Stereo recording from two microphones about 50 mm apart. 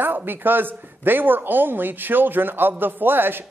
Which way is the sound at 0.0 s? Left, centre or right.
Right.